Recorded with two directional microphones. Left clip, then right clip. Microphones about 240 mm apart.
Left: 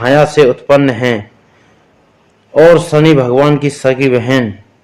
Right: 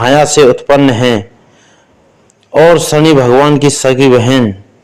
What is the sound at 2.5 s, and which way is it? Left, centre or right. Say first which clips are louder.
A man's voice: even; right.